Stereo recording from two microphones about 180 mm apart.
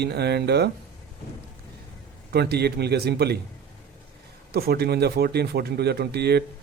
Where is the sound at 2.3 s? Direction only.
65° right (ahead or behind).